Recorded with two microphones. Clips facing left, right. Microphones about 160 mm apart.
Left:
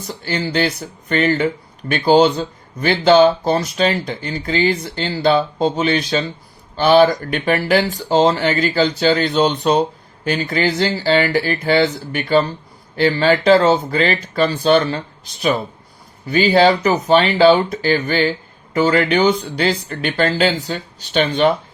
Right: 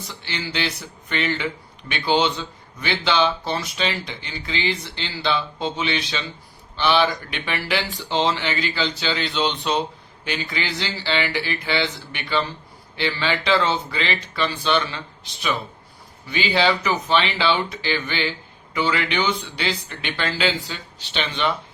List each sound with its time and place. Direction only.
0.0 s speech: 45° left (ahead or behind)